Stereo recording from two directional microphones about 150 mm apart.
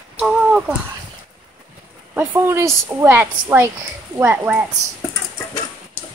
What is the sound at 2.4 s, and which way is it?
A woman's voice, 20° right (ahead or behind).